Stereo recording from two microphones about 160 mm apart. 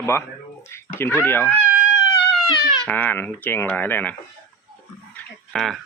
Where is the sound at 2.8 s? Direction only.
10° left (ahead or behind).